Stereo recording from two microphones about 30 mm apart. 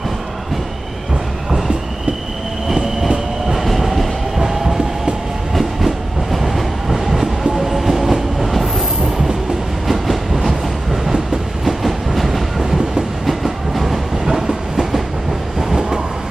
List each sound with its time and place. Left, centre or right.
3.5 s train: centre
4.4 s train: centre
5.5 s train: centre
9.8 s train: centre
11.6 s train: centre
14.2 s train: centre